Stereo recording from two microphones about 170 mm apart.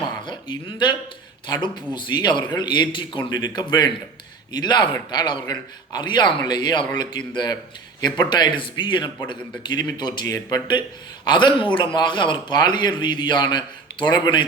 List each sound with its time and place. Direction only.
0.3 s a man's voice: 30° left (ahead or behind)